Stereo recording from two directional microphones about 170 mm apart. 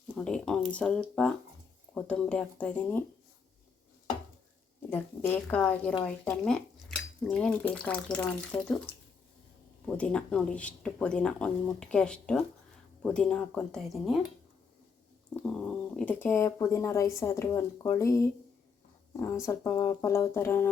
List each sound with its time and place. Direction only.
0.1 s speech: 5° left (ahead or behind)
4.9 s speech: 10° left (ahead or behind)
9.8 s speech: 5° left (ahead or behind)
15.5 s speech: 5° left (ahead or behind)